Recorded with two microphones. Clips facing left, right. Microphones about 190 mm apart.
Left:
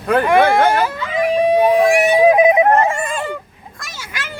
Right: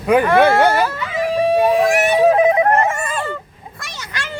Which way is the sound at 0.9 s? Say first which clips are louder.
Left 2 dB; 15° left (ahead or behind).